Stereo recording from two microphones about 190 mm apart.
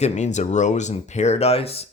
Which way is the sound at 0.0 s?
35° left (ahead or behind).